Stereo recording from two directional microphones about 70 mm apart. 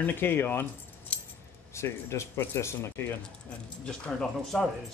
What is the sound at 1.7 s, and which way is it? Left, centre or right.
Speech, left.